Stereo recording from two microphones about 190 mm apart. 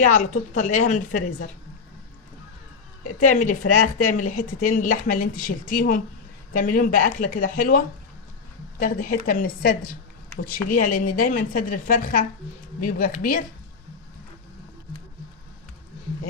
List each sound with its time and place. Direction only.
0.1 s a woman's voice: 40° left (ahead or behind)
3.2 s speech: 40° left (ahead or behind)